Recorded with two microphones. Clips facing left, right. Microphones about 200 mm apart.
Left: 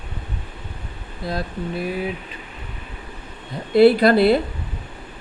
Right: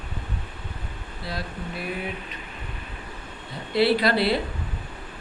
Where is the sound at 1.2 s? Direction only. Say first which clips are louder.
Left 7 dB; 45° left (ahead or behind).